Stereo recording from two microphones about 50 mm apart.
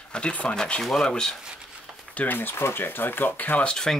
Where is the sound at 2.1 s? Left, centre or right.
Left.